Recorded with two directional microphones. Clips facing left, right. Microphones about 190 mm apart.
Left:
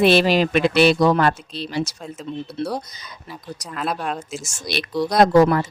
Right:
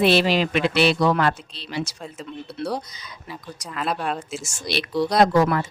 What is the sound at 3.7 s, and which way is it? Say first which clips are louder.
Speech: even; centre (ahead or behind).